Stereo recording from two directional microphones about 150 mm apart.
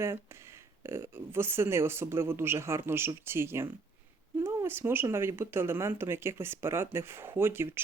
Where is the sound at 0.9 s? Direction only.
15° right (ahead or behind).